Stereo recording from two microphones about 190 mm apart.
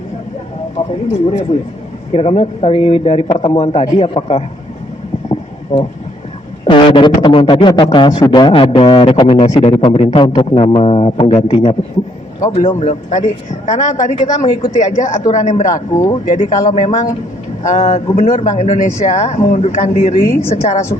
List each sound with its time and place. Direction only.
2.1 s a man's voice: 30° left (ahead or behind)
5.7 s a man's voice: 30° left (ahead or behind); by 20.4 s 45° left (ahead or behind)
20.5 s a man's voice: 30° left (ahead or behind)